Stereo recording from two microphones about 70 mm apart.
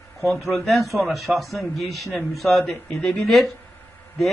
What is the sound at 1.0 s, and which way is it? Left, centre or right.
Speech, centre.